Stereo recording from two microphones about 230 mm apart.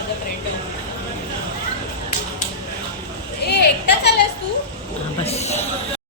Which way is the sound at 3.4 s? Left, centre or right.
Left.